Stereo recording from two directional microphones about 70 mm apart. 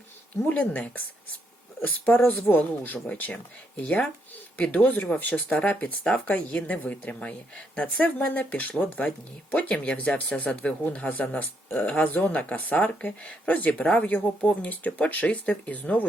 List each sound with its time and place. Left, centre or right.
0.4 s a woman's voice: left
2.0 s a woman's voice: left